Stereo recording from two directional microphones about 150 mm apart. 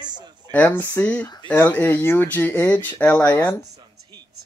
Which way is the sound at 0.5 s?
10° left (ahead or behind).